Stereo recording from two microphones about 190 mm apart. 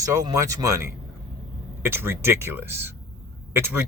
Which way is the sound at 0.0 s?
15° right (ahead or behind).